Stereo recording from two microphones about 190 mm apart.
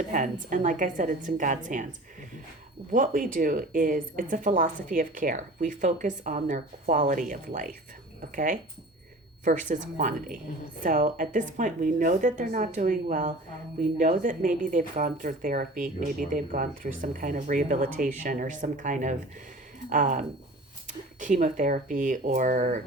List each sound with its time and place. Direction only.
0.1 s speech: 45° right (ahead or behind)
2.9 s speech: 45° right (ahead or behind)
9.4 s speech: 45° right (ahead or behind)